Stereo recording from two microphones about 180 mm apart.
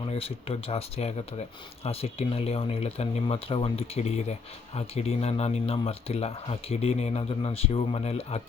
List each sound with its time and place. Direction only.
0.0 s speech: 30° left (ahead or behind)